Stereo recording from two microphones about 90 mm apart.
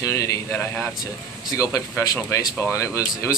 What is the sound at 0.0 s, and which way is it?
Speech, 35° left (ahead or behind).